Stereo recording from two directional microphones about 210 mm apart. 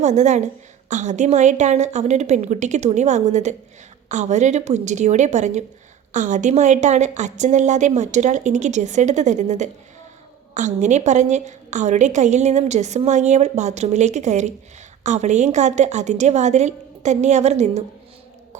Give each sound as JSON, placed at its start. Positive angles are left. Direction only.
{"t": 0.0, "sound": "a woman's voice", "side_deg": -35}